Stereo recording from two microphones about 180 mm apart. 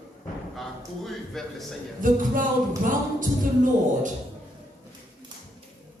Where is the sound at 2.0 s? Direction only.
50° right (ahead or behind).